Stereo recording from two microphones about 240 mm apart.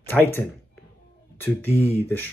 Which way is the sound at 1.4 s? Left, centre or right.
Centre.